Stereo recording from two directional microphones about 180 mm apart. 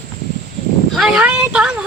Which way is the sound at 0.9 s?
Centre (ahead or behind).